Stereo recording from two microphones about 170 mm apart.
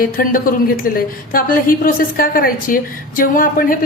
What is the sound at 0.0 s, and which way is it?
A woman's voice, 55° left (ahead or behind).